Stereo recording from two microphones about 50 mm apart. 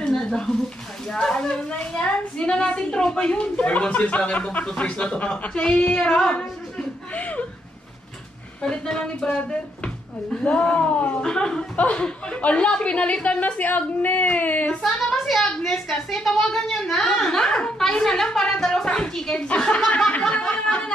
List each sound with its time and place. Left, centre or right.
0.1 s a sound: centre
1.1 s a woman's voice: centre
8.6 s a woman's voice: centre
11.7 s a woman's voice: left
15.0 s a woman's voice: centre; by 20.4 s left